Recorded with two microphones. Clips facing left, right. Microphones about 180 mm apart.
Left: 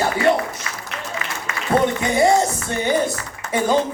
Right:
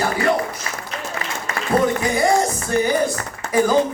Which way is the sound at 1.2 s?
35° right (ahead or behind).